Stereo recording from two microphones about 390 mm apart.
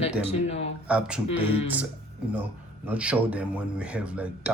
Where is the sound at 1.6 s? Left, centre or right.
Centre.